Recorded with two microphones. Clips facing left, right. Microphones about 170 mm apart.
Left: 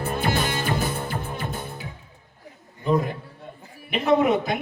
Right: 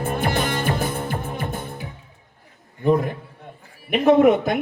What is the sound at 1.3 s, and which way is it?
Music, 50° right (ahead or behind).